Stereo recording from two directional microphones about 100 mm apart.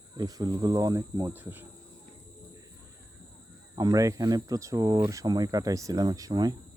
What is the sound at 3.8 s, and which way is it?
Speech, 40° right (ahead or behind).